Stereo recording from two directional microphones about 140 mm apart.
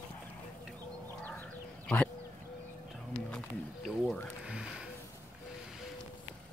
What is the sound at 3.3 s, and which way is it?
Wild animals, centre (ahead or behind).